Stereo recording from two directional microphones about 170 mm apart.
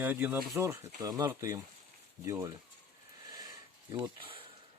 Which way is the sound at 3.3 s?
25° right (ahead or behind).